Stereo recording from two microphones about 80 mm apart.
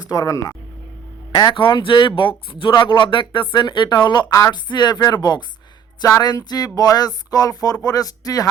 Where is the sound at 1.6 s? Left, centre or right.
Left.